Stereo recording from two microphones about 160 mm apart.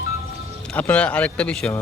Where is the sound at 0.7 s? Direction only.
10° left (ahead or behind).